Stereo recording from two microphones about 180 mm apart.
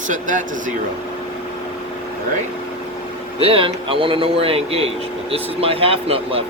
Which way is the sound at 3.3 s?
30° right (ahead or behind).